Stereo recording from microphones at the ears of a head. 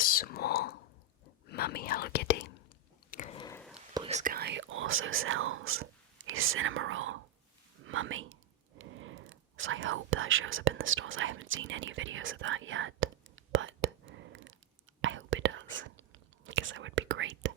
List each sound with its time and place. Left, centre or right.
0.0 s whispering: left
3.1 s chewing: left
4.2 s speech: right
7.8 s whispering: right